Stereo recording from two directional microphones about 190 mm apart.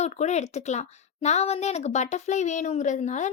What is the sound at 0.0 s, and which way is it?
Speech, 35° left (ahead or behind).